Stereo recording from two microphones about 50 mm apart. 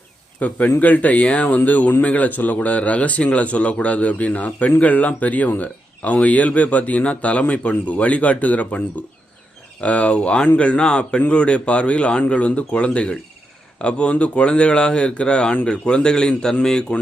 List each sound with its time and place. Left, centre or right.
0.3 s a man's voice: left
9.8 s a man's voice: left